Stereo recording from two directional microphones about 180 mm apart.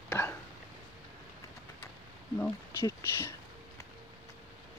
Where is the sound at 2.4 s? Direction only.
15° left (ahead or behind).